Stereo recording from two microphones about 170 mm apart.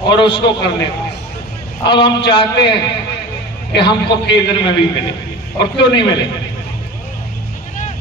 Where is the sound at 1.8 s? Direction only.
30° left (ahead or behind).